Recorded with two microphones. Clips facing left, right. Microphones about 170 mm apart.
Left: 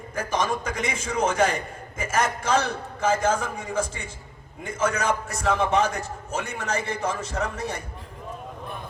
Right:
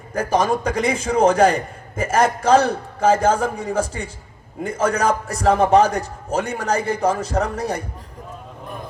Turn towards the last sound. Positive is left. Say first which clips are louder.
# right 7 dB
turn(degrees=-35)  # may be behind; listen again after turning